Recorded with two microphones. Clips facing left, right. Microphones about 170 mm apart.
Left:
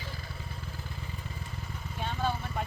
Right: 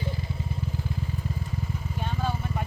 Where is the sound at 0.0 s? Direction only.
20° right (ahead or behind).